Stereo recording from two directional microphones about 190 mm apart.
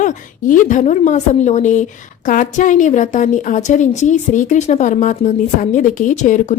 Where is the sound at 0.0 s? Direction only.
40° left (ahead or behind).